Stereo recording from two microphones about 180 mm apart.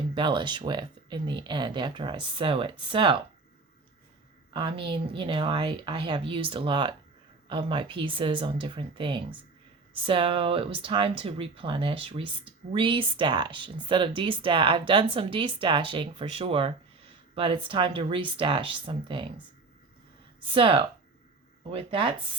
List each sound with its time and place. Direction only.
0.1 s speech: 25° right (ahead or behind)
4.5 s speech: 30° right (ahead or behind)
20.4 s speech: 30° right (ahead or behind)